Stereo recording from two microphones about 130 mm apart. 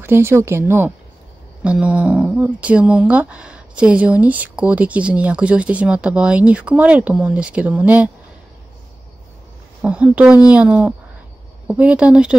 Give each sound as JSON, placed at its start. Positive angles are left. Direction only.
{"t": 0.0, "sound": "speech", "side_deg": -20}
{"t": 9.8, "sound": "speech", "side_deg": -10}